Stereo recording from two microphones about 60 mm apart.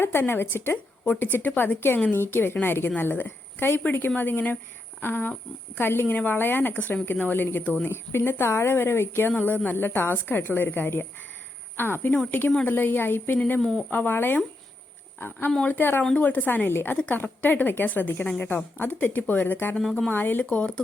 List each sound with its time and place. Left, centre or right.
0.0 s a woman's voice: left
4.9 s insect: left
5.7 s a woman's voice: left
7.9 s a woman's voice: left
13.6 s speech: centre
13.9 s a woman's voice: left
19.8 s speech: centre
20.1 s a woman's voice: left
20.4 s speech: centre